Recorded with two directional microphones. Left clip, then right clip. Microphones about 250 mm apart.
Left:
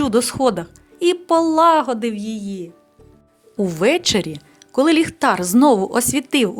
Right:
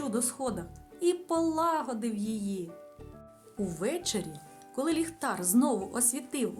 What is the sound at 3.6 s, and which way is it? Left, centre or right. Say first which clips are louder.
Speech: left 17 dB; right.